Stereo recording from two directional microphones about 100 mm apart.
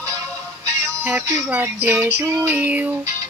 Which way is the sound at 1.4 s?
15° right (ahead or behind).